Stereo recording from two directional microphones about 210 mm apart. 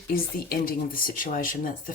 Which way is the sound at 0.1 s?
45° left (ahead or behind).